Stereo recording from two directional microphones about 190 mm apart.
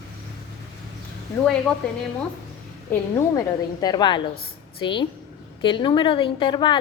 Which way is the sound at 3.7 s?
20° left (ahead or behind).